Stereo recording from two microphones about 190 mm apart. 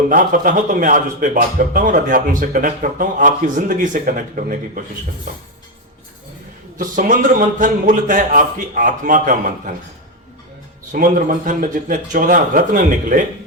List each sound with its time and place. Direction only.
0.1 s speech: 45° right (ahead or behind)
6.7 s speech: 45° right (ahead or behind)
10.9 s speech: 45° right (ahead or behind)